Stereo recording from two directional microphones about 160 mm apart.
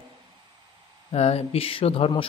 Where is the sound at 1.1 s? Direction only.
40° left (ahead or behind).